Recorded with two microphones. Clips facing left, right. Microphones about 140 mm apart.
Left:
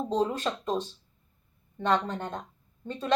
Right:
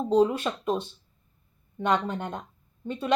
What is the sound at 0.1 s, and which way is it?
Speech, 10° right (ahead or behind).